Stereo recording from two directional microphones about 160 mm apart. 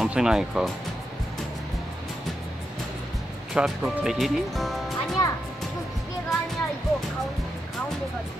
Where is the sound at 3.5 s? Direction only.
Centre (ahead or behind).